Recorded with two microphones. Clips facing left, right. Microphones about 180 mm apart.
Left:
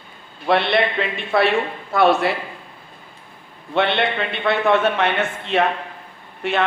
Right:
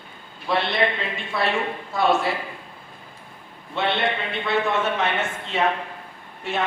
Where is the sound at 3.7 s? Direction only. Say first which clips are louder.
Left 4 dB; 65° left (ahead or behind).